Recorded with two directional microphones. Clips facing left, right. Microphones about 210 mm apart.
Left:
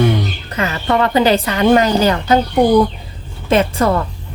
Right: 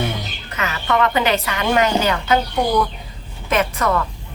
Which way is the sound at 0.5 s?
35° left (ahead or behind).